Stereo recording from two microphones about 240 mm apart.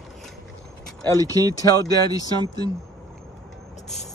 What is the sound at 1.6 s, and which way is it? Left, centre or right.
Speech, centre.